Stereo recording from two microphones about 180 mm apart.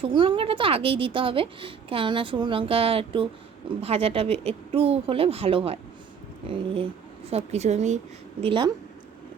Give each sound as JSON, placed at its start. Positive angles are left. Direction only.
{"t": 0.0, "sound": "a woman's voice", "side_deg": -25}
{"t": 7.3, "sound": "speech", "side_deg": -35}